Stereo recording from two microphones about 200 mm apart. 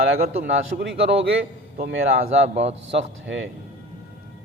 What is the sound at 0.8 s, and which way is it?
Speech, 65° right (ahead or behind).